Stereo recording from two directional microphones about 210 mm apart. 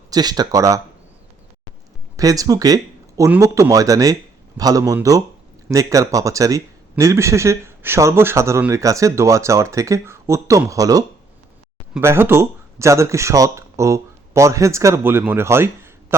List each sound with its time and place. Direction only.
0.1 s speech: 20° right (ahead or behind)
2.1 s speech: 15° right (ahead or behind)